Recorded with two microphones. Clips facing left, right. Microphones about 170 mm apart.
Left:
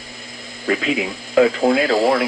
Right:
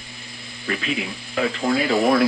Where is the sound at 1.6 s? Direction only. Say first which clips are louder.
Left 4 dB; 35° left (ahead or behind).